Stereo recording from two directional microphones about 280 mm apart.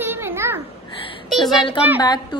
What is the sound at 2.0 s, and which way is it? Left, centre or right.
Speech, centre.